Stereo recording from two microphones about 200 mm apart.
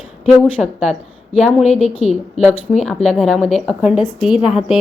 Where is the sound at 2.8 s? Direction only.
5° left (ahead or behind).